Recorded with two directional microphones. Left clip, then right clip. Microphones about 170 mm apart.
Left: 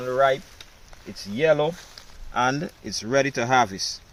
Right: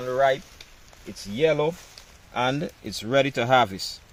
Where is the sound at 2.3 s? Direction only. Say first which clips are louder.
Left 2 dB; 40° right (ahead or behind).